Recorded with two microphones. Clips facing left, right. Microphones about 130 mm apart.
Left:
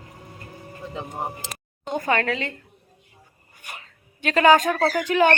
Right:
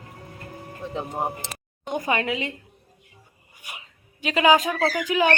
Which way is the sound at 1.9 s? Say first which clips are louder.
Left 2 dB; 15° right (ahead or behind).